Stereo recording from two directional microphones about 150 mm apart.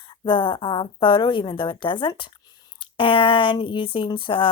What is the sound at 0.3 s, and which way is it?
Speech, 35° left (ahead or behind).